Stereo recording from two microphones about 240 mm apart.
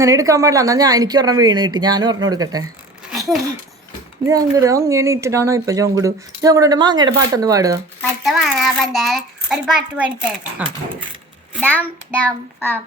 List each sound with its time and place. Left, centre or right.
0.0 s speech: centre
3.1 s a sound: centre
4.3 s speech: centre
8.2 s a child's voice: centre
11.6 s child singing: centre